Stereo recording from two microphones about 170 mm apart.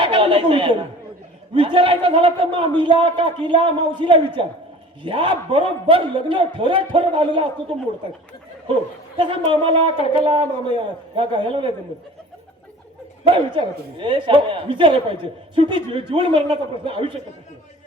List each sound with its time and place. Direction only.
0.0 s a woman's voice: 30° right (ahead or behind)
9.5 s a man's voice: 30° right (ahead or behind)
10.0 s speech: 30° left (ahead or behind)
10.2 s speech: 30° right (ahead or behind)
13.3 s speech: 30° right (ahead or behind)